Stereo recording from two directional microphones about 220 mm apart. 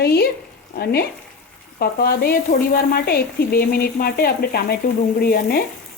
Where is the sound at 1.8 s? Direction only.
45° left (ahead or behind).